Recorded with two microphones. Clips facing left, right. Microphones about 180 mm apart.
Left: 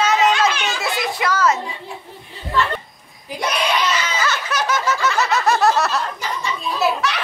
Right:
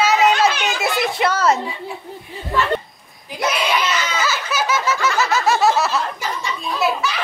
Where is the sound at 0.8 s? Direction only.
25° right (ahead or behind).